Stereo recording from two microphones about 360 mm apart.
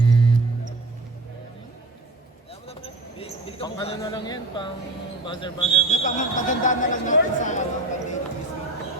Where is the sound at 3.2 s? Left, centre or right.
Centre.